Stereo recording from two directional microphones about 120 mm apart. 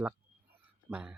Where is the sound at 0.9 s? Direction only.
15° right (ahead or behind).